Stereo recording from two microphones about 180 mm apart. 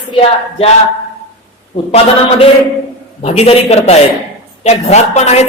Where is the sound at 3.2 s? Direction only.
40° left (ahead or behind).